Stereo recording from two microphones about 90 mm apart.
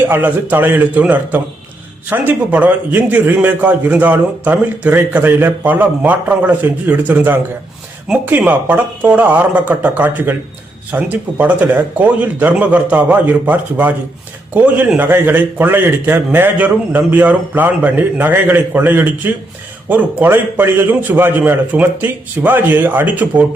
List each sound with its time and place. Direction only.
0.1 s a man's voice: 20° right (ahead or behind)